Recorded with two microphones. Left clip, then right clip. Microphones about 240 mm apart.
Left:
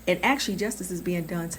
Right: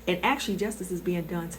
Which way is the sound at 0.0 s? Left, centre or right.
Left.